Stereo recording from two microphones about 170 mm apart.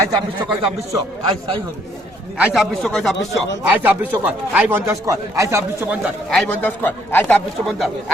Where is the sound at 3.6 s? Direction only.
10° right (ahead or behind).